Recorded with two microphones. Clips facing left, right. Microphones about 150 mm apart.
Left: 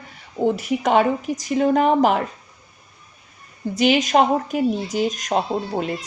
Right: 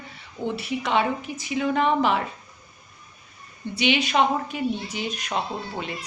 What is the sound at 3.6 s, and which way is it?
A woman's voice, 40° left (ahead or behind).